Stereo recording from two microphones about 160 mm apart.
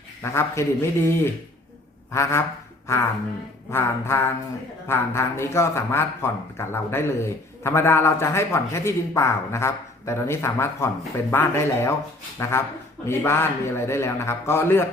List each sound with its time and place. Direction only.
0.2 s a man's voice: 15° left (ahead or behind)